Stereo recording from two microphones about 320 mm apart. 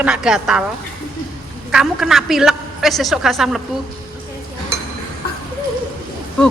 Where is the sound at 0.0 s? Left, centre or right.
Centre.